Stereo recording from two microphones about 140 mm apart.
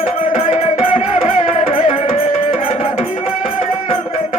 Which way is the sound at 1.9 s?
50° left (ahead or behind).